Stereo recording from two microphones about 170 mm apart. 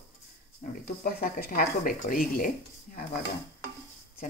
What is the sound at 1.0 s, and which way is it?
Speech, 60° left (ahead or behind).